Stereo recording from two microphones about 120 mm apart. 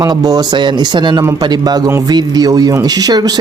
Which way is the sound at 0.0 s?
30° right (ahead or behind).